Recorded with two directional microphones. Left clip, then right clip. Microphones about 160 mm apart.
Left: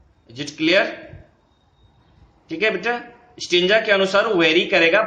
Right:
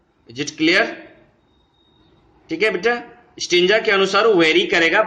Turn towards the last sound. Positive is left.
turn(degrees=-15)  # may be behind; listen again after turning